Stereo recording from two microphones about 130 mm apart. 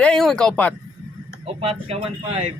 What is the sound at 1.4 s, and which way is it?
Speech, 50° right (ahead or behind).